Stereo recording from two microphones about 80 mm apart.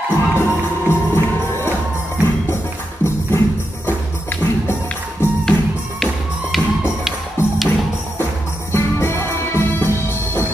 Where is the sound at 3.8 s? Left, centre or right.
Left.